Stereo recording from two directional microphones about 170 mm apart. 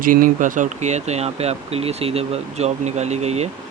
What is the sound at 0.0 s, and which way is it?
Speech, 55° right (ahead or behind).